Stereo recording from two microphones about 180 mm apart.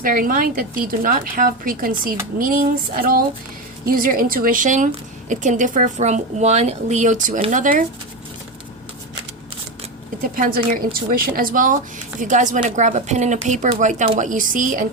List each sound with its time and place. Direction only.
0.0 s speech: 50° right (ahead or behind)
10.2 s speech: 50° right (ahead or behind)